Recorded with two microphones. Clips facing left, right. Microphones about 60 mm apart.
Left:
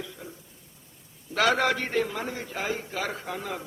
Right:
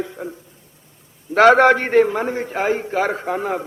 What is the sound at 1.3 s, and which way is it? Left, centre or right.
A man's voice, right.